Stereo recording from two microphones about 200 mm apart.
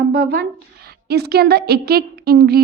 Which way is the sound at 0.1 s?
50° right (ahead or behind).